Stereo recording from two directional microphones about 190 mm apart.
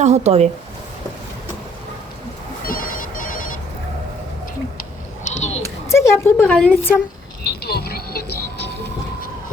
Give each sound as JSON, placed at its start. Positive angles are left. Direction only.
{"t": 0.0, "sound": "speech", "side_deg": -35}
{"t": 2.6, "sound": "ringtone", "side_deg": 45}
{"t": 5.2, "sound": "a sound", "side_deg": 35}
{"t": 5.9, "sound": "speech", "side_deg": 15}
{"t": 7.6, "sound": "music", "side_deg": 55}